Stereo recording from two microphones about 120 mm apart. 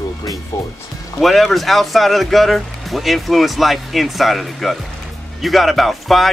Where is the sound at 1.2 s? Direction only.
Centre (ahead or behind).